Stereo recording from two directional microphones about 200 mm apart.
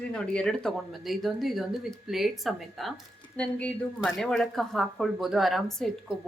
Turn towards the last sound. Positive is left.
turn(degrees=0)  # may be behind; listen again after turning